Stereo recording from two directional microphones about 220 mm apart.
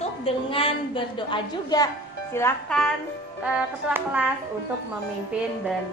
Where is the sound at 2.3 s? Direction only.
10° left (ahead or behind).